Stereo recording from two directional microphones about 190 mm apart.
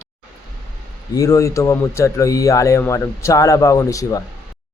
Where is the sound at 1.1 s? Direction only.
15° left (ahead or behind).